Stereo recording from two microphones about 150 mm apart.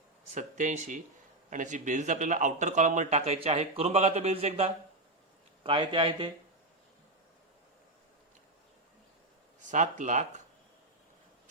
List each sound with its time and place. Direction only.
0.3 s speech: 55° right (ahead or behind)
5.6 s speech: 35° right (ahead or behind)
9.6 s speech: 55° right (ahead or behind)